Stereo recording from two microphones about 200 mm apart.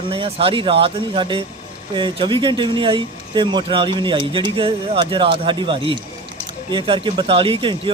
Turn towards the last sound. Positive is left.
turn(degrees=-25)  # may be behind; listen again after turning